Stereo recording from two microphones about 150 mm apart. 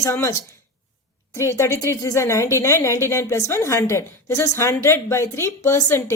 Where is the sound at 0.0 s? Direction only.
20° left (ahead or behind).